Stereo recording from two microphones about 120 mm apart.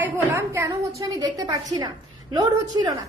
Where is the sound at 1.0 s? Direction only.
30° right (ahead or behind).